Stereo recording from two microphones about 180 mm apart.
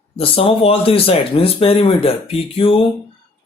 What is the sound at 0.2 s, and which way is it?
Speech, 30° left (ahead or behind).